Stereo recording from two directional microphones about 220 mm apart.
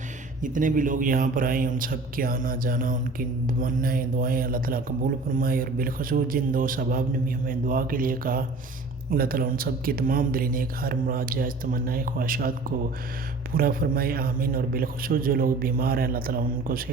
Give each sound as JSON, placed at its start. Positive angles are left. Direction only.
{"t": 0.4, "sound": "a man's voice", "side_deg": -35}